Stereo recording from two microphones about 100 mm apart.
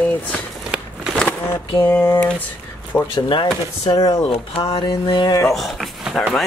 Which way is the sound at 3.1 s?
50° left (ahead or behind).